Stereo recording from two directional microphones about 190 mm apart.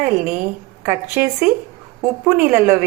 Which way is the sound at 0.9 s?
10° right (ahead or behind).